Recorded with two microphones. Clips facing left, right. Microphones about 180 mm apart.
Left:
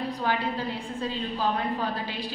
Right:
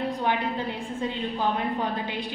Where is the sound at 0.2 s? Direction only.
20° right (ahead or behind).